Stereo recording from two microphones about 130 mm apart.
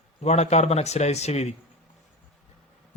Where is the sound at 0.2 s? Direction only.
60° left (ahead or behind).